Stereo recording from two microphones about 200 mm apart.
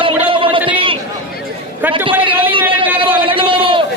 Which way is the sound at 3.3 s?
25° right (ahead or behind).